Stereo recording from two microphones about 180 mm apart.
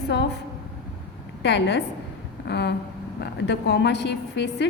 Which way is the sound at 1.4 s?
75° left (ahead or behind).